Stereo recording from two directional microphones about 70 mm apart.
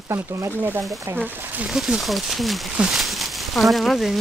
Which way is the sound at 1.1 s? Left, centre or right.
Centre.